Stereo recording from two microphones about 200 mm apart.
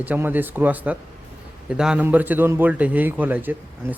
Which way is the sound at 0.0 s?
10° right (ahead or behind).